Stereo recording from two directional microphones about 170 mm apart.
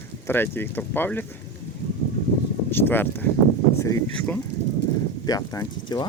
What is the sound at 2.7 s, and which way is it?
Speech, 10° left (ahead or behind).